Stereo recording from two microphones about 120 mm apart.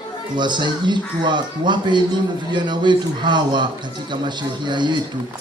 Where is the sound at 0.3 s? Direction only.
40° right (ahead or behind).